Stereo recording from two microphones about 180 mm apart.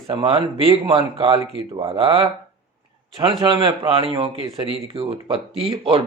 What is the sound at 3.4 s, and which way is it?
Speech, 25° right (ahead or behind).